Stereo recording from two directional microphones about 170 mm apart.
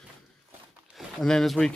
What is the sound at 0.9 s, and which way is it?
Speech, centre (ahead or behind).